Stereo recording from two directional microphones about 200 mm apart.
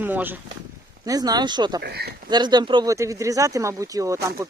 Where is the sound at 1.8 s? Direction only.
55° right (ahead or behind).